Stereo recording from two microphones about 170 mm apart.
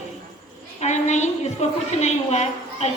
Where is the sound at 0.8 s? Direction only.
45° left (ahead or behind).